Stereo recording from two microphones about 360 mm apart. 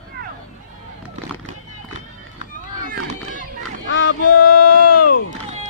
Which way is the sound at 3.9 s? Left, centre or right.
Left.